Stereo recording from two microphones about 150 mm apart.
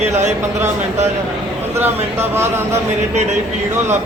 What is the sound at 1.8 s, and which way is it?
Speech, 15° right (ahead or behind).